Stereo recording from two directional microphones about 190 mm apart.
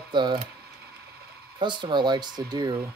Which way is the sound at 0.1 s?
25° right (ahead or behind).